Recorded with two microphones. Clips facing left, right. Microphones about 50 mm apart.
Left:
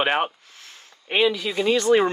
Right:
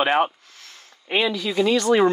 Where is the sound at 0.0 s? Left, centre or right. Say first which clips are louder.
Right 2 dB; centre.